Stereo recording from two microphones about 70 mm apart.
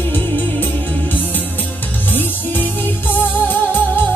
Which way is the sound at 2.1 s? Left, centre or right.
Left.